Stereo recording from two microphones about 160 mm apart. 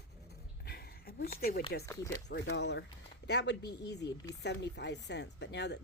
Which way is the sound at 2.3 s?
90° left.